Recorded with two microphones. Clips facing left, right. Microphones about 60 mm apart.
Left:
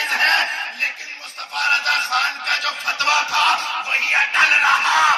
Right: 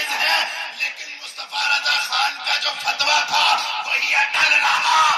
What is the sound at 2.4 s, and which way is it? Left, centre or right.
Music, left.